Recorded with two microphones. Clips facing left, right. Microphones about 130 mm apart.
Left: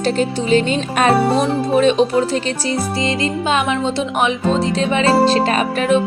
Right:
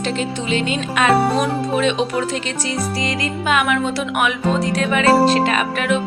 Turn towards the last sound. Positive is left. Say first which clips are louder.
# left 4 dB
turn(degrees=35)  # may be behind; listen again after turning